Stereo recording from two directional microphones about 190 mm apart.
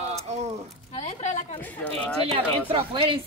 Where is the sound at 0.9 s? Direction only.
35° left (ahead or behind).